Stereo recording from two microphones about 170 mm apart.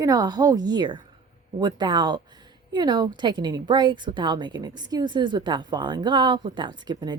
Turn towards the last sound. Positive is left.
turn(degrees=-25)  # may be behind; listen again after turning